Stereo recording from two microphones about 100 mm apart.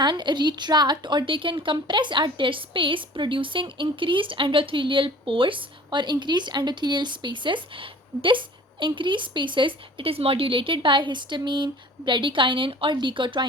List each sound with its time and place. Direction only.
0.0 s a woman's voice: 50° right (ahead or behind)